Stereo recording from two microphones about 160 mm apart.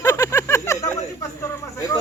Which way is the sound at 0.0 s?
20° left (ahead or behind).